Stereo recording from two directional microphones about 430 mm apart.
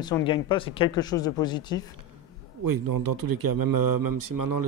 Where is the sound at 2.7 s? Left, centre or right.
Right.